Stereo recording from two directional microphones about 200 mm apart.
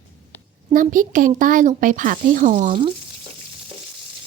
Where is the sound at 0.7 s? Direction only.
40° right (ahead or behind).